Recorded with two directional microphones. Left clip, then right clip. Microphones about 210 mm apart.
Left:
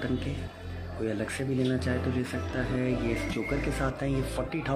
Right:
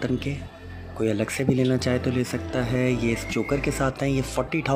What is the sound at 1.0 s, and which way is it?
Speech, 25° right (ahead or behind).